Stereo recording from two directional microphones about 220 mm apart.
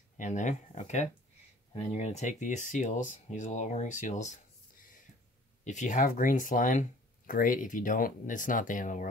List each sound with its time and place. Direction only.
0.2 s speech: 35° left (ahead or behind)
5.6 s speech: 35° left (ahead or behind)